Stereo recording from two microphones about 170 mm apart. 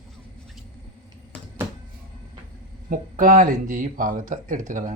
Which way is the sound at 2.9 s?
50° right (ahead or behind).